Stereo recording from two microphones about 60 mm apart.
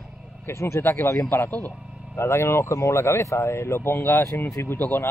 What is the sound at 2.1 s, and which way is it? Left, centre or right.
Speech, left.